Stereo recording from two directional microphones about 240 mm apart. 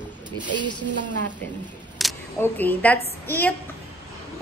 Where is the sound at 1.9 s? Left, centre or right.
Centre.